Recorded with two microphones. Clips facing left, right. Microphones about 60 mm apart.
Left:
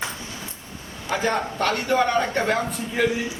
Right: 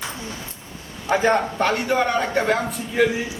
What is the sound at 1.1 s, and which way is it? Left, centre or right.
A man's voice, right.